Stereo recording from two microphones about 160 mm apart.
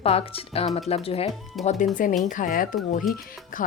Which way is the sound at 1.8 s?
55° left (ahead or behind).